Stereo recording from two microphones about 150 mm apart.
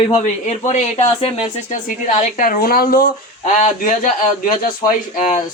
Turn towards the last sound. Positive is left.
turn(degrees=60)  # may be behind; listen again after turning